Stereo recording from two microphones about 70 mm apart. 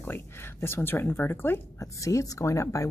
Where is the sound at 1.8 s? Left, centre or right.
Left.